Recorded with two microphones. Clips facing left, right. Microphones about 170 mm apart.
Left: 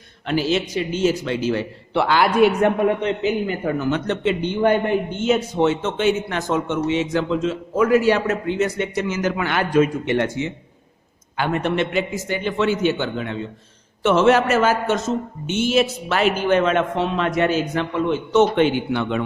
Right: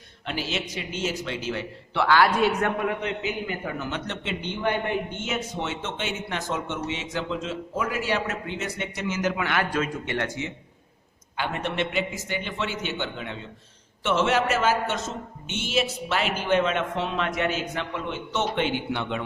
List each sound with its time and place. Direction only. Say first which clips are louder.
0.3 s speech: left 10 dB; 40° left (ahead or behind)
1.9 s a man's voice: left 2 dB; 20° left (ahead or behind)
2.5 s a man's voice: left 8 dB; 30° left (ahead or behind)
3.6 s a man's voice: left 9 dB; 45° left (ahead or behind)
5.2 s a man's voice: left 12 dB; 35° left (ahead or behind)
9.7 s a man's voice: left 10 dB; 20° left (ahead or behind)
11.3 s a man's voice: left 7 dB; 50° left (ahead or behind)